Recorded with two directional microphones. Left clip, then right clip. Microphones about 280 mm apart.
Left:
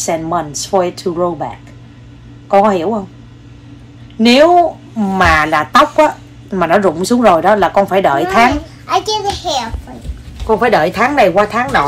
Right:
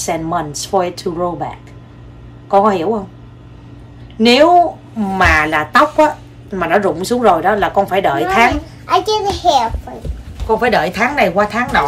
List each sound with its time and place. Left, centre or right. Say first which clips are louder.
0.0 s a woman's voice: left 2 dB; centre
2.5 s a woman's voice: left 1 dB; centre
4.2 s a woman's voice: left 1 dB; centre
8.8 s a child's voice: right 1 dB; centre
10.6 s speech: left 3 dB; centre